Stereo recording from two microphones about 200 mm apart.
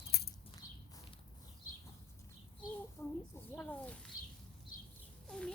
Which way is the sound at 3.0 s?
15° left (ahead or behind).